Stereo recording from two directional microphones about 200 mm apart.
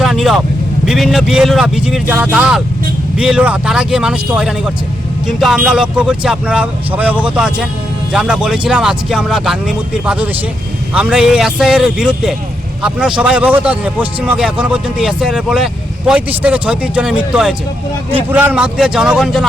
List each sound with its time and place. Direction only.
0.0 s vehicle: centre (ahead or behind)
0.9 s a man's voice: centre (ahead or behind)